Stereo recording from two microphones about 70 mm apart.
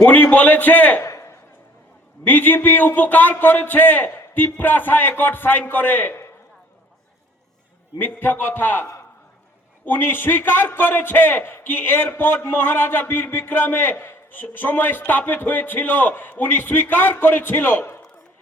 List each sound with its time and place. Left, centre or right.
0.0 s a man's voice: left
1.0 s a sound: left
2.2 s a man's voice: left
7.9 s a man's voice: left